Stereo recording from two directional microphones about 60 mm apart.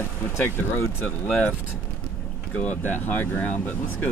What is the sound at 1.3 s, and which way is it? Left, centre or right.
Speech, centre.